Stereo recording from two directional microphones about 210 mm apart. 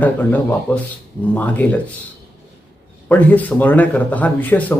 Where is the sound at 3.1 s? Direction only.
5° left (ahead or behind).